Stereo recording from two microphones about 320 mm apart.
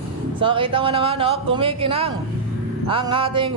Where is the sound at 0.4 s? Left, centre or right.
Centre.